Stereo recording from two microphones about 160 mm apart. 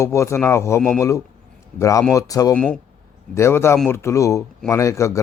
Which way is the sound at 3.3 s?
15° left (ahead or behind).